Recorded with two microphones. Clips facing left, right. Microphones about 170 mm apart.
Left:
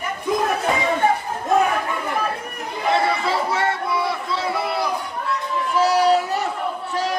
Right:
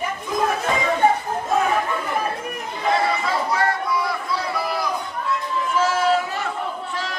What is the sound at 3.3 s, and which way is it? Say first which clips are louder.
Chatter: even; 25° left (ahead or behind).